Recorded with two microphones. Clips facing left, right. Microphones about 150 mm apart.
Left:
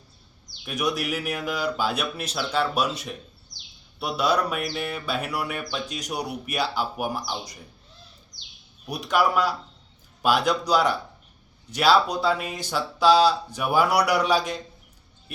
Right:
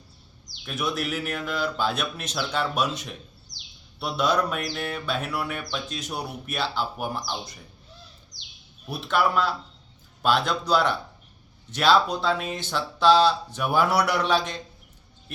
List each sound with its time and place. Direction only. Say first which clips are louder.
0.6 s music: left 2 dB; 15° left (ahead or behind)
8.9 s music: left 1 dB; 15° left (ahead or behind)